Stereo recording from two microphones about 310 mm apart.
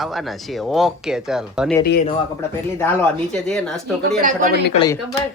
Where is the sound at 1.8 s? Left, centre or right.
Left.